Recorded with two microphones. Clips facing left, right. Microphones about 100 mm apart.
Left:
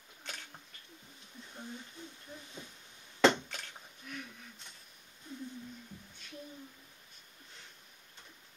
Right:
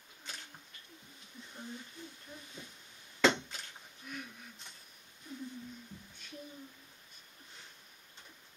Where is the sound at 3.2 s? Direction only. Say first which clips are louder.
Left 2 dB; 50° left (ahead or behind).